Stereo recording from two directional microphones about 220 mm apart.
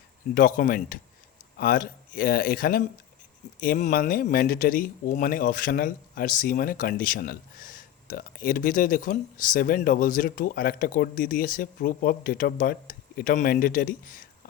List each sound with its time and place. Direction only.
0.3 s speech: 40° left (ahead or behind)